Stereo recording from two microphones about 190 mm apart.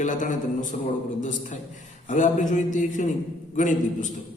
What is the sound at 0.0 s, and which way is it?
A man's voice, 40° left (ahead or behind).